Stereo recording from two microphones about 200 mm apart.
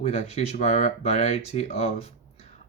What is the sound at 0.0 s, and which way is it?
Speech, 35° left (ahead or behind).